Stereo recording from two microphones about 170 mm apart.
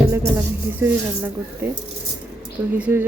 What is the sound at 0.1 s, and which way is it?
Speech, 15° right (ahead or behind).